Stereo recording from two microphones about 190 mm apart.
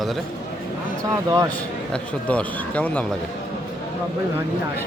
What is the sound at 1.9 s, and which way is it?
Speech, 5° left (ahead or behind).